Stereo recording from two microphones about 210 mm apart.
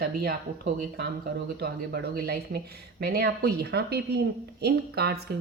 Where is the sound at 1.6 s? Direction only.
50° right (ahead or behind).